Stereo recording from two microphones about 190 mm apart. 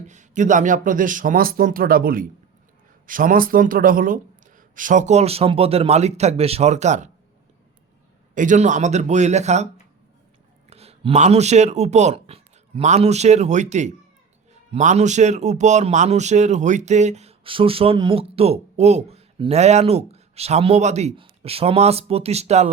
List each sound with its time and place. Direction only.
0.1 s a man's voice: 40° right (ahead or behind)
8.4 s a man's voice: 40° right (ahead or behind)
10.7 s a man's voice: 35° right (ahead or behind)